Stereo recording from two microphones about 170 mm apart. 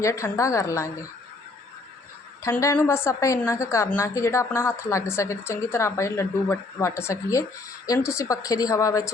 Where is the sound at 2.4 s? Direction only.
15° left (ahead or behind).